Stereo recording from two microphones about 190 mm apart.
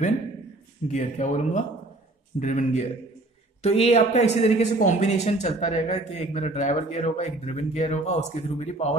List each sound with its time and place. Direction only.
0.9 s speech: 40° left (ahead or behind)